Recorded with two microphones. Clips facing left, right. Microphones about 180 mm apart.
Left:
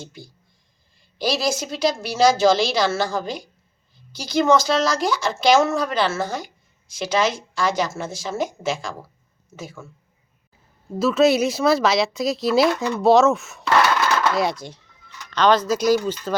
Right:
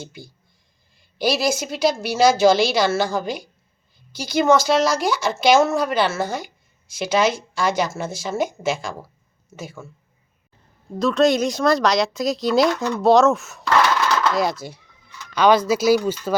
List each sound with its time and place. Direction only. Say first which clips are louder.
0.0 s speech: right 2 dB; 5° right (ahead or behind)
11.0 s speech: even; 5° left (ahead or behind)